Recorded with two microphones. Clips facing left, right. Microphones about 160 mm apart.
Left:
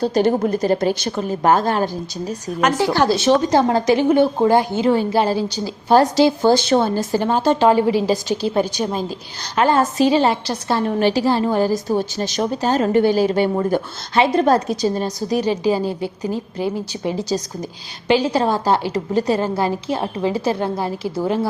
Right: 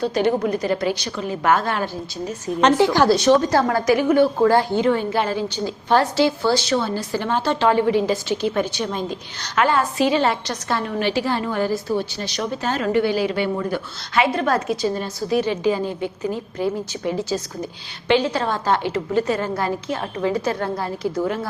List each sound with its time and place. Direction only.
0.0 s a woman's voice: 40° left (ahead or behind)
2.7 s a woman's voice: 20° right (ahead or behind)
3.1 s a woman's voice: 25° left (ahead or behind)
4.8 s a woman's voice: 30° left (ahead or behind)
6.4 s a woman's voice: 50° left (ahead or behind); by 17.2 s 25° left (ahead or behind)
18.3 s a woman's voice: 15° left (ahead or behind)
18.5 s a woman's voice: 35° left (ahead or behind)